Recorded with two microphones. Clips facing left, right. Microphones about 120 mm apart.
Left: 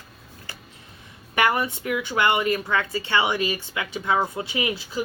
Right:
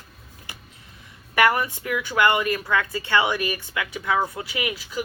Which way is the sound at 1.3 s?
25° left (ahead or behind).